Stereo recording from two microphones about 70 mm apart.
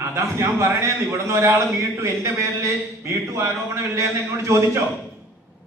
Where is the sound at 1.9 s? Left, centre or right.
Right.